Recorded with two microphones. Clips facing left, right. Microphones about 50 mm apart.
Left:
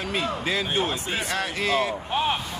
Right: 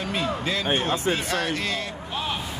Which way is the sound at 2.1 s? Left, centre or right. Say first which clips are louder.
Left 4 dB; left.